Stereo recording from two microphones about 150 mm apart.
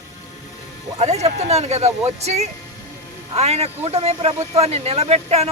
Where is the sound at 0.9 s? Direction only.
45° right (ahead or behind).